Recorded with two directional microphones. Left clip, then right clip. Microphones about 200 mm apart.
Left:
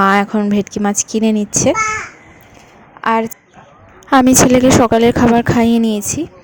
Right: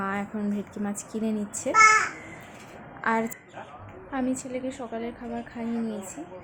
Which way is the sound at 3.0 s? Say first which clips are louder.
Left 11 dB; 30° left (ahead or behind).